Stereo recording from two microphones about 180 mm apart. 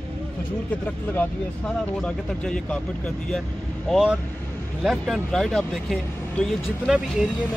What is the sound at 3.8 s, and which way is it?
Speech, centre (ahead or behind).